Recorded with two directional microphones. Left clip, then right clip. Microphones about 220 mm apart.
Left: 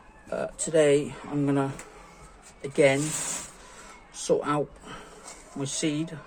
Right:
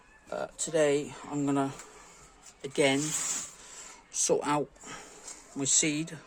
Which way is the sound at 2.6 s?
35° right (ahead or behind).